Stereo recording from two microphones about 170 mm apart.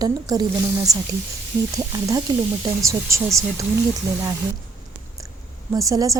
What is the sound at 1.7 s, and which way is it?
A woman's voice, 20° right (ahead or behind).